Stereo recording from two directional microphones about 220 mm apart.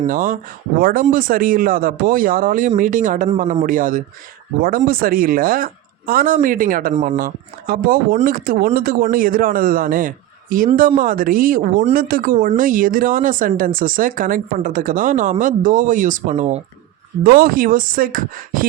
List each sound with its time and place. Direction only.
0.0 s speech: 40° right (ahead or behind)